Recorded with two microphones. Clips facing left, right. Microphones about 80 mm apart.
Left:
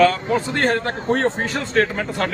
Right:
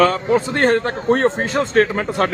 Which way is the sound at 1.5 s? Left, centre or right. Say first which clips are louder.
Right 4 dB; right.